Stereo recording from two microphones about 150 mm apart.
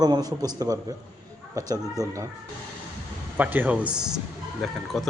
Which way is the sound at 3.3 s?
10° right (ahead or behind).